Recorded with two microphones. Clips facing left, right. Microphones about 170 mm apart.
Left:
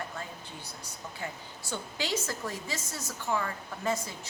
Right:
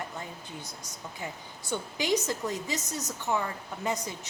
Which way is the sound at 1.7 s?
15° right (ahead or behind).